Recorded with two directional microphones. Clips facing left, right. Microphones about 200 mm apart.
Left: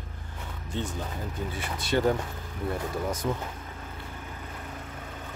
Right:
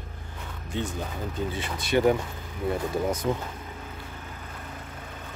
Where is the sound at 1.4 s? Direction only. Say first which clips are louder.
Right 5 dB; 20° right (ahead or behind).